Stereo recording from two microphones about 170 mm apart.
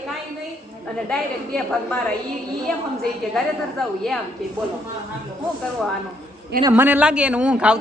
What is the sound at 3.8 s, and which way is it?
Speech, centre (ahead or behind).